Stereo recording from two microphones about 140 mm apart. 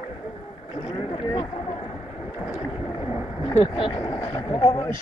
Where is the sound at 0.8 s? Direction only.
40° left (ahead or behind).